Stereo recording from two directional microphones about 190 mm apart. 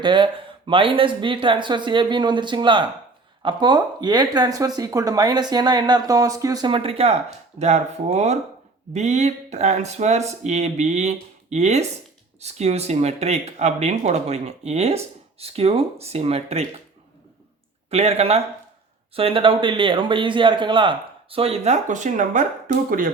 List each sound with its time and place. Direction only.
0.0 s a man's voice: 25° right (ahead or behind)
17.9 s a man's voice: 35° right (ahead or behind)